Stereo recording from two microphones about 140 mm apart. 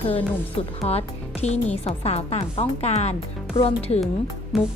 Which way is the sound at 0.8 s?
50° left (ahead or behind).